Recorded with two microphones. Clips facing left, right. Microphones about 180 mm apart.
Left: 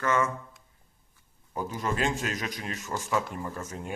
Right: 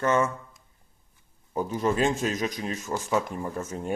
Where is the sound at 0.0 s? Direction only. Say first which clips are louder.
Right 3 dB; 25° right (ahead or behind).